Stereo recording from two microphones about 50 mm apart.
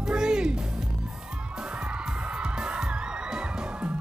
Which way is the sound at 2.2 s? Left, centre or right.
Centre.